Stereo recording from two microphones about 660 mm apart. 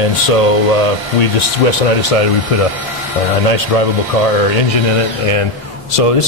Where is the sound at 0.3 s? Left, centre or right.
Left.